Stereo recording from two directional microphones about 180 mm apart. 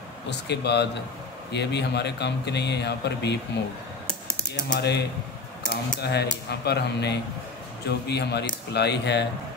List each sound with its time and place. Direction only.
0.3 s speech: 70° left (ahead or behind)
4.7 s speech: 65° left (ahead or behind)